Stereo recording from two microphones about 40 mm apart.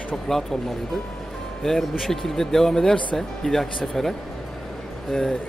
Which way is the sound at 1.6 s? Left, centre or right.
Centre.